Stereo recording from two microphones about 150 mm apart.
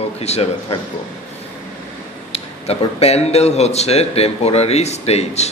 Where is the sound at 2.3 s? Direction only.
45° left (ahead or behind).